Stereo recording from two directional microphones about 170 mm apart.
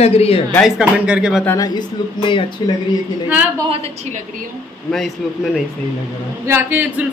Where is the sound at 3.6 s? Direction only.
40° right (ahead or behind).